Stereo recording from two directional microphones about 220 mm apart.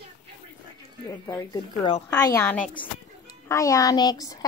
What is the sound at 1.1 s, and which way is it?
A woman's voice, 15° left (ahead or behind).